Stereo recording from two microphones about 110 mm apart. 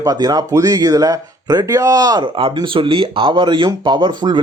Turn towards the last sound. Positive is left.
turn(degrees=-45)  # may be behind; listen again after turning